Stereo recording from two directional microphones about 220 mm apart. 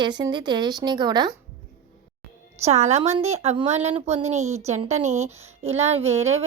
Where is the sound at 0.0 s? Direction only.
20° right (ahead or behind).